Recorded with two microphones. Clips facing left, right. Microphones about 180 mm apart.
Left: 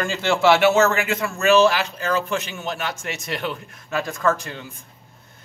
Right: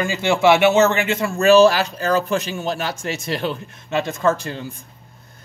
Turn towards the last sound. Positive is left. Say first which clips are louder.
# right 3 dB
turn(degrees=-35)  # may be behind; listen again after turning